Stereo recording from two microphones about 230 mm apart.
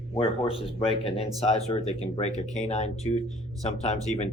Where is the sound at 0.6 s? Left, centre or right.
Left.